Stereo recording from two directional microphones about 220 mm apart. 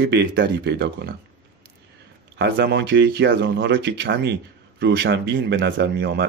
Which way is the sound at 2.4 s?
50° right (ahead or behind).